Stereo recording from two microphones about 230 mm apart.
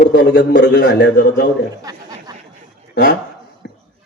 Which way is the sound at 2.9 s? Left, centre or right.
Left.